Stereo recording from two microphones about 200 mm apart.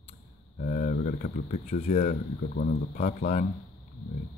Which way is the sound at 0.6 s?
35° left (ahead or behind).